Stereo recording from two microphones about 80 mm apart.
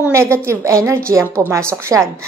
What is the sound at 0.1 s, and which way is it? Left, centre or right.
A woman's voice, right.